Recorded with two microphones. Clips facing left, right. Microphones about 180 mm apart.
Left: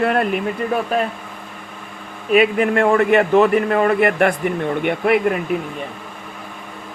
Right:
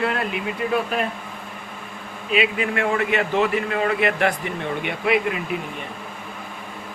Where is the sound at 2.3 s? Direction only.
50° left (ahead or behind).